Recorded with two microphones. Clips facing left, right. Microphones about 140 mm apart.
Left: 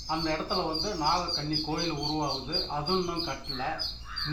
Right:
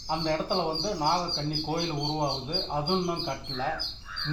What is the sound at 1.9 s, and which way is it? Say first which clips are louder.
Speech: right 1 dB; 5° right (ahead or behind).